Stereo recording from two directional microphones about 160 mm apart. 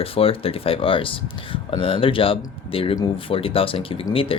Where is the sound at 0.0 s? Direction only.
35° left (ahead or behind).